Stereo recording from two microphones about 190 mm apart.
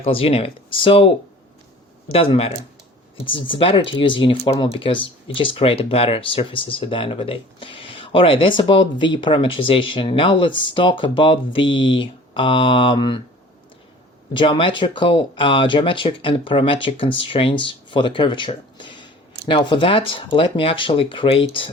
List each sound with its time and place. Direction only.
0.0 s speech: 30° left (ahead or behind)
2.1 s speech: 30° left (ahead or behind)
14.3 s speech: 25° left (ahead or behind)